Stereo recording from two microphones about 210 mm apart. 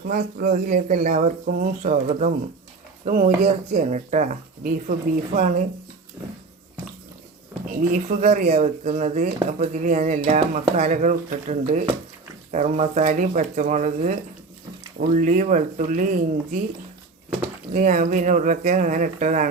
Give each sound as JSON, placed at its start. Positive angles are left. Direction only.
{"t": 0.1, "sound": "speech", "side_deg": -40}
{"t": 7.9, "sound": "speech", "side_deg": -35}
{"t": 17.7, "sound": "speech", "side_deg": -40}